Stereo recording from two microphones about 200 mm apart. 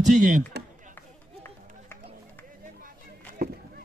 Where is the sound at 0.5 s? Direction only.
55° right (ahead or behind).